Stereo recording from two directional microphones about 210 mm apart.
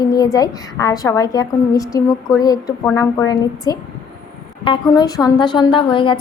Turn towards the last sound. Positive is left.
turn(degrees=25)  # may be behind; listen again after turning